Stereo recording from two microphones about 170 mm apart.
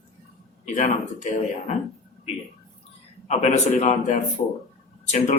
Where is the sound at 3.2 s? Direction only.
40° left (ahead or behind).